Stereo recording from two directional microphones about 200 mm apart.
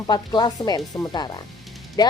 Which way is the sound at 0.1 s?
20° left (ahead or behind).